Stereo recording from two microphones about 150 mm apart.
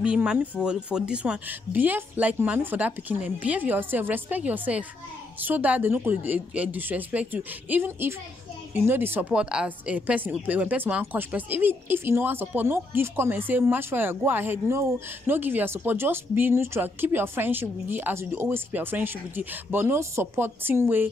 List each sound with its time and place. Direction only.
0.0 s a woman's voice: 5° right (ahead or behind)